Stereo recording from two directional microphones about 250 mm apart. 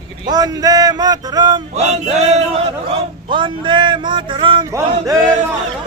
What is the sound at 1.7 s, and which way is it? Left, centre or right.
A man's voice, right.